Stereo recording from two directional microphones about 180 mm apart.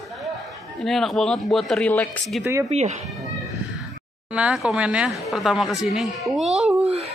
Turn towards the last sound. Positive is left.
turn(degrees=-5)  # may be behind; listen again after turning